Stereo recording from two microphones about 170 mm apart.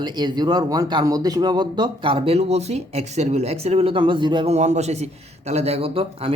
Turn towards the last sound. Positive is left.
turn(degrees=-35)  # may be behind; listen again after turning